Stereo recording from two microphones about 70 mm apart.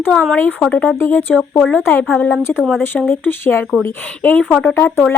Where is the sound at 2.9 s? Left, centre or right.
Left.